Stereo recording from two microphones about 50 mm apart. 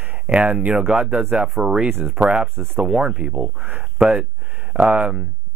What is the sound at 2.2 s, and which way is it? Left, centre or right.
Speech, centre.